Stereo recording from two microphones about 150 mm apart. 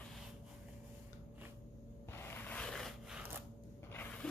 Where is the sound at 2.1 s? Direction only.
15° left (ahead or behind).